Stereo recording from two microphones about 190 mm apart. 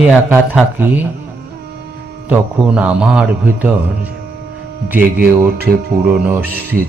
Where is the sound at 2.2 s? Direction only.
10° right (ahead or behind).